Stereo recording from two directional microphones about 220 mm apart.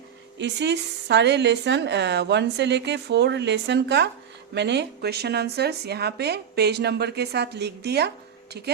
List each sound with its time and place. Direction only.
0.3 s a woman's voice: 50° right (ahead or behind)